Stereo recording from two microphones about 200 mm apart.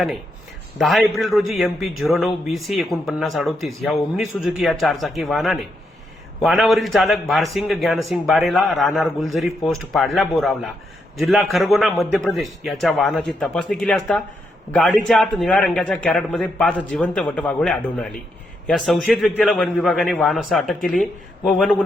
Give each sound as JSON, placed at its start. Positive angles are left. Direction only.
{"t": 0.8, "sound": "a man's voice", "side_deg": 0}